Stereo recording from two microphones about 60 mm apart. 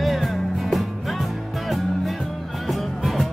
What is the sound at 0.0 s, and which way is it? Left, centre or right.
Music, centre.